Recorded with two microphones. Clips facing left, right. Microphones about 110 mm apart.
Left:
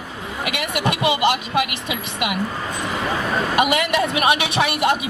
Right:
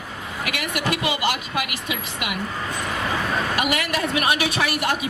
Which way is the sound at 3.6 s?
20° left (ahead or behind).